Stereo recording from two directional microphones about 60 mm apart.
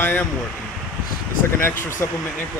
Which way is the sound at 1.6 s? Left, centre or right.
Left.